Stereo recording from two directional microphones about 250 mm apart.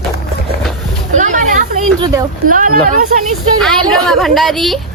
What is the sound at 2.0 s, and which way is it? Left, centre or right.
Speech, centre.